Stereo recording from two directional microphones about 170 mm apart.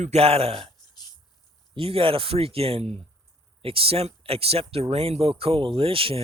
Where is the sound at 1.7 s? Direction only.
35° right (ahead or behind).